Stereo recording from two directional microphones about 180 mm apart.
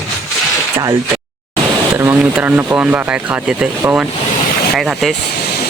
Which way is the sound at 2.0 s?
15° right (ahead or behind).